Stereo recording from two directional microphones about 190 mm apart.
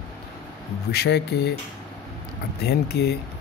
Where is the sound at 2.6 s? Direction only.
60° left (ahead or behind).